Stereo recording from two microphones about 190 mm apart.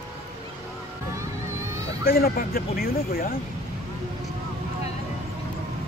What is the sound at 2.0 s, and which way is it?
Speech, 55° left (ahead or behind).